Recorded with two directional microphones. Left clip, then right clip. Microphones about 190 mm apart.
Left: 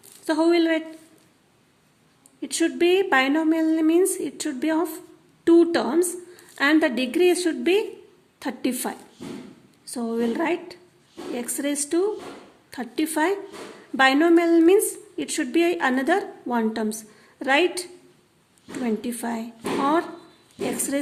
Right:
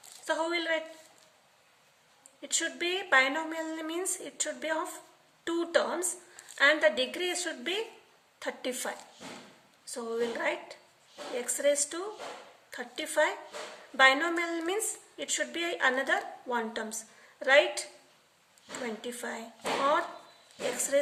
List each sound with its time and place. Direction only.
0.3 s a woman's voice: 35° left (ahead or behind)
2.4 s a woman's voice: 35° left (ahead or behind)
19.0 s a woman's voice: 35° left (ahead or behind)